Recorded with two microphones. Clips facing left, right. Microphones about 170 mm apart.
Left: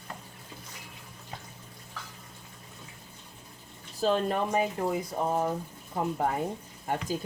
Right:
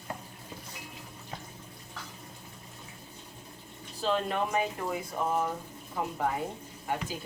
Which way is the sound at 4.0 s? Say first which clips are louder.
Left 3 dB; 45° left (ahead or behind).